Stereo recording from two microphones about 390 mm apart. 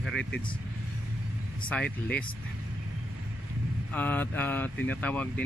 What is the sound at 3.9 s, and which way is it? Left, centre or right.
Speech, centre.